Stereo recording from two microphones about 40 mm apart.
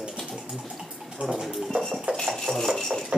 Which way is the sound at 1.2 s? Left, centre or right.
Right.